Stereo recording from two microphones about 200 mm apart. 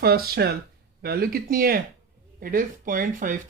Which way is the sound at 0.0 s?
50° right (ahead or behind).